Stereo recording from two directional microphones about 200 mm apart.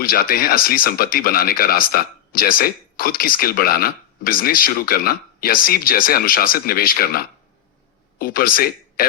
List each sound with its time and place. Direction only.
0.0 s speech: 45° left (ahead or behind)